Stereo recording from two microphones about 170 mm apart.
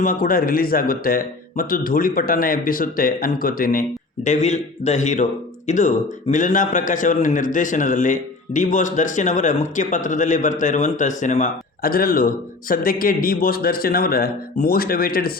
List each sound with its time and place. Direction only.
0.0 s a man's voice: 55° left (ahead or behind)